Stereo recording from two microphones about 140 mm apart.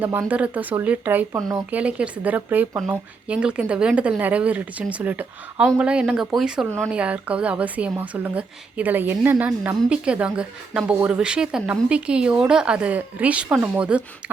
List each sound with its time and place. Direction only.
0.0 s a woman's voice: 15° right (ahead or behind)